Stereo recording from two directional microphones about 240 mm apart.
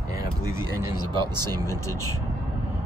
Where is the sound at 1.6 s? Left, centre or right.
Centre.